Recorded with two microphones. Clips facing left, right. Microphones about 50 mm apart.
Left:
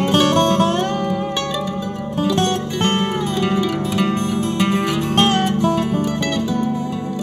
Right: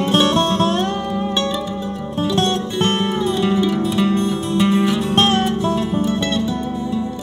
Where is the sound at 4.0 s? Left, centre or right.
Left.